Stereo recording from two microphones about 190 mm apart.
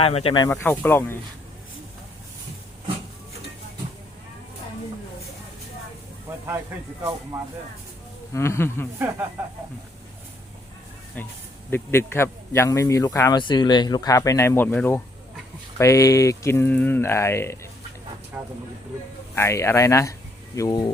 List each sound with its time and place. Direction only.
0.0 s speech: 30° left (ahead or behind)
0.4 s a man's voice: 10° left (ahead or behind)
7.0 s speech: 15° right (ahead or behind)
8.3 s a man's voice: 15° left (ahead or behind)
11.7 s a man's voice: 10° left (ahead or behind)
18.3 s speech: 10° right (ahead or behind)
19.4 s a man's voice: 15° left (ahead or behind)